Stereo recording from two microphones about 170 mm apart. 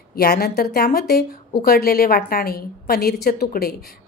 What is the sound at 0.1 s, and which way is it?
A woman's voice, 65° left (ahead or behind).